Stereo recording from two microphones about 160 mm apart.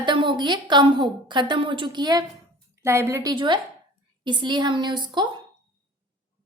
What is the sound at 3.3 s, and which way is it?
Speech, 30° right (ahead or behind).